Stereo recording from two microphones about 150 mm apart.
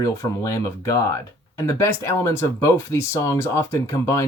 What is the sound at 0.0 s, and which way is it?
Speech, 25° left (ahead or behind).